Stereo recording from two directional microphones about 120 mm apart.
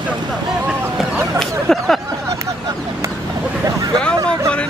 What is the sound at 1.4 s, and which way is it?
Speech, centre (ahead or behind).